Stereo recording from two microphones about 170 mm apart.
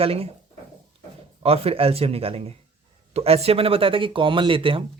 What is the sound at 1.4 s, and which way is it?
Speech, 35° right (ahead or behind).